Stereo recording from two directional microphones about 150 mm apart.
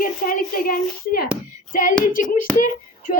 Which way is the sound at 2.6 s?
60° left (ahead or behind).